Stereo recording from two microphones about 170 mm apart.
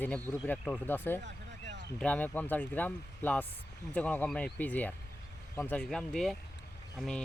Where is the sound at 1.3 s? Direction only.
90° right.